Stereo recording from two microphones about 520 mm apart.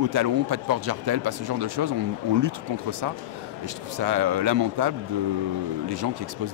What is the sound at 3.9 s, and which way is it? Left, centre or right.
Speech, right.